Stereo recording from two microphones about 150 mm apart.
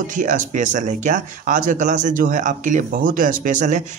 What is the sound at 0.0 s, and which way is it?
Speech, 60° right (ahead or behind).